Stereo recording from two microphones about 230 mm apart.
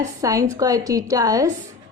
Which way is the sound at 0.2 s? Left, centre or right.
Centre.